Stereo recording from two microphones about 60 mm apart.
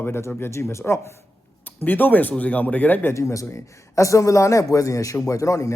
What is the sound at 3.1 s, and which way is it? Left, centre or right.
A man's voice, left.